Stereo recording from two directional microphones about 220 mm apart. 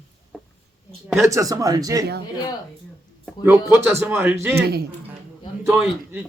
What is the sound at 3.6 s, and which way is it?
Speech, 5° right (ahead or behind).